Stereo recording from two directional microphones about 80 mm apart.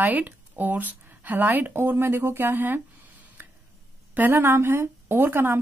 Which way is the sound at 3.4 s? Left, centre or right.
Right.